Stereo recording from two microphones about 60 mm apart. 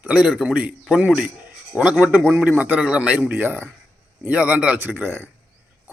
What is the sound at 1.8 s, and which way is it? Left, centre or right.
A man's voice, right.